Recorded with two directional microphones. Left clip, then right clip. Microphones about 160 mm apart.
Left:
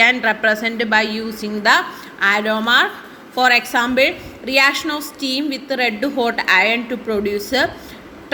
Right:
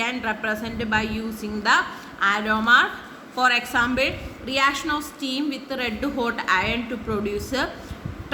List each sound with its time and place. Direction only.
0.0 s a woman's voice: 30° left (ahead or behind)